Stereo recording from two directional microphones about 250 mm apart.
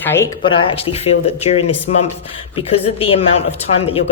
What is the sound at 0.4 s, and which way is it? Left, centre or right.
Speech, left.